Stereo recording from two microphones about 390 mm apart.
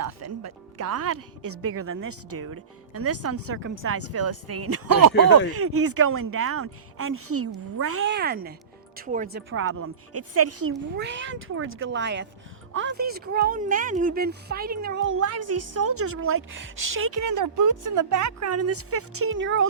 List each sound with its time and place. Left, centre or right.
0.0 s a woman's voice: right